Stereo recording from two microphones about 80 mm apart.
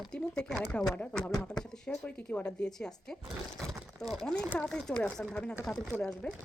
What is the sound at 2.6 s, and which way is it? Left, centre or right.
Speech, centre.